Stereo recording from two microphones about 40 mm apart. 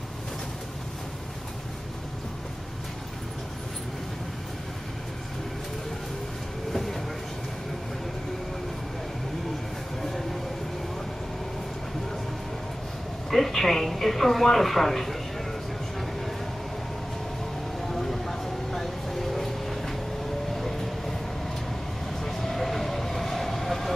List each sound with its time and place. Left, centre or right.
6.7 s train: centre
13.3 s speech: centre
17.8 s vehicle: centre
20.5 s train: centre
22.2 s train: centre